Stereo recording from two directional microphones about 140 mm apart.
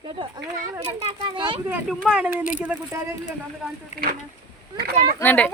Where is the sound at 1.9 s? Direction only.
5° right (ahead or behind).